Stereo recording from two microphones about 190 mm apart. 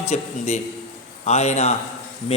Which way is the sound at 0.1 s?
35° left (ahead or behind).